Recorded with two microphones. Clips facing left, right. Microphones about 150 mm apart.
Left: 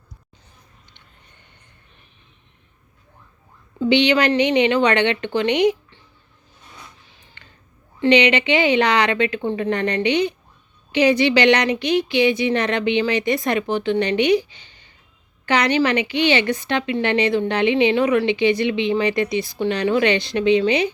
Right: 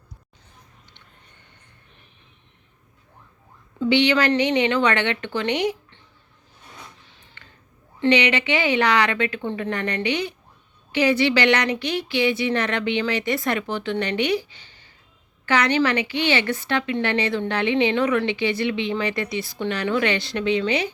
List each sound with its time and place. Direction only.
3.8 s a woman's voice: 20° left (ahead or behind)
8.0 s a woman's voice: 20° left (ahead or behind)